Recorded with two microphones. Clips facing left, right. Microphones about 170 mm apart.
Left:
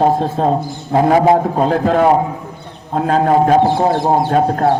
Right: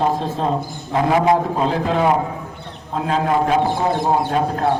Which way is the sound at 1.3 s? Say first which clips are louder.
Left 4 dB; 50° left (ahead or behind).